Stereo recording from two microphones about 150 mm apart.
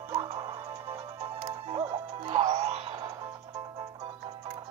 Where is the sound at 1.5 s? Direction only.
45° right (ahead or behind).